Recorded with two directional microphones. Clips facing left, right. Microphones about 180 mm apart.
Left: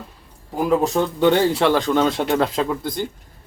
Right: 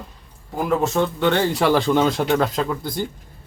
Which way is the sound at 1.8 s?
10° right (ahead or behind).